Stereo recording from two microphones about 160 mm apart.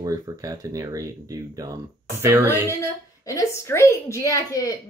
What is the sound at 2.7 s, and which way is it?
A woman's voice, 20° left (ahead or behind).